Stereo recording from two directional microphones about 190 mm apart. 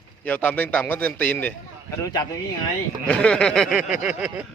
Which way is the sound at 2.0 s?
20° left (ahead or behind).